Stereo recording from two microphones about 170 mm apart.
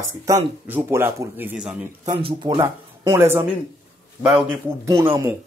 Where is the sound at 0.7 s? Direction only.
10° right (ahead or behind).